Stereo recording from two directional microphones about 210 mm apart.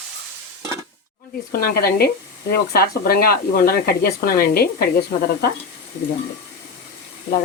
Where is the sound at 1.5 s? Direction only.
45° left (ahead or behind).